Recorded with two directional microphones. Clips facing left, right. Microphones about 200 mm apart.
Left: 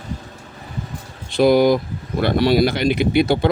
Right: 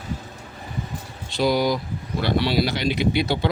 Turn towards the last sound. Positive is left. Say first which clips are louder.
# left 5 dB
turn(degrees=50)  # may be behind; listen again after turning